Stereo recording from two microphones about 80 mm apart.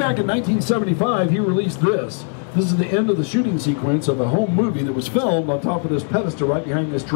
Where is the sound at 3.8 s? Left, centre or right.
Left.